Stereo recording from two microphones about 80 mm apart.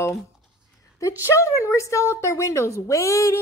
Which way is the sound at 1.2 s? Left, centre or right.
Left.